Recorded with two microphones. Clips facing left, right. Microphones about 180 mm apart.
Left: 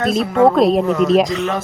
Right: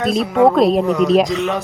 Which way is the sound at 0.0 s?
Centre (ahead or behind).